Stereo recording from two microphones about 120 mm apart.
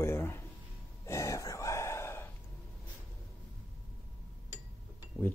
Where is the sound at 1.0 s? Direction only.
25° left (ahead or behind).